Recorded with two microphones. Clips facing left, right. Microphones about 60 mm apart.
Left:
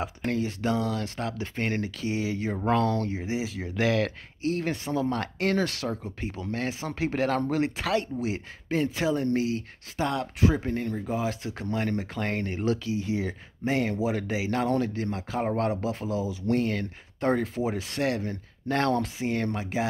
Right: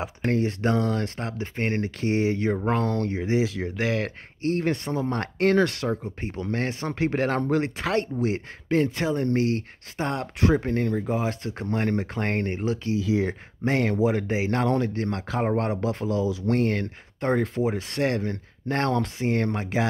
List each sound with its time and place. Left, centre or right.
0.2 s speech: right
2.5 s speech: right
3.0 s speech: right
3.7 s speech: right
4.4 s speech: right
6.2 s speech: right
9.9 s speech: right
10.4 s speech: right
11.0 s speech: right
15.0 s speech: right
15.4 s speech: right
15.8 s speech: right
18.7 s speech: right
19.2 s speech: right